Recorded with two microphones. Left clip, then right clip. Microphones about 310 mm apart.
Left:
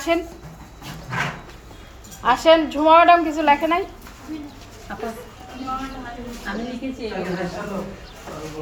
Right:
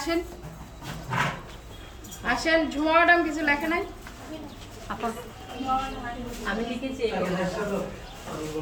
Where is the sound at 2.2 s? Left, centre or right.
Centre.